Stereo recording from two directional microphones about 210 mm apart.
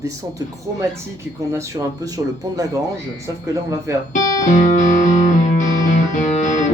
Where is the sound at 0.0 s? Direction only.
15° right (ahead or behind).